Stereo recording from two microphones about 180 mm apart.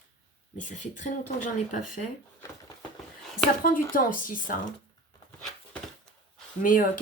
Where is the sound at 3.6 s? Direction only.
50° left (ahead or behind).